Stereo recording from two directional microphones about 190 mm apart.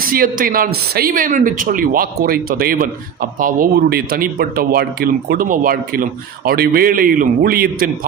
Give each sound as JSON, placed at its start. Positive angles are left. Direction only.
{"t": 0.0, "sound": "speech", "side_deg": -50}